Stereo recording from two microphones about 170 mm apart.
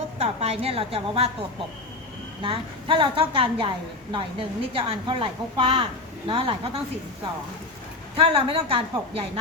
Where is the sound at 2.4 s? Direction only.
30° right (ahead or behind).